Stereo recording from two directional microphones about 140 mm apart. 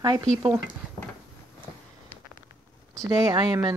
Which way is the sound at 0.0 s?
30° right (ahead or behind).